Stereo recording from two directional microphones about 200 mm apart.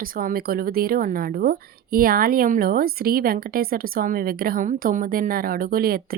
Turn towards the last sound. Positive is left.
turn(degrees=-50)  # may be behind; listen again after turning